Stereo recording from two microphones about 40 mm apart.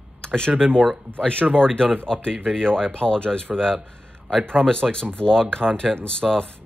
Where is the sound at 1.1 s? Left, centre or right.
Left.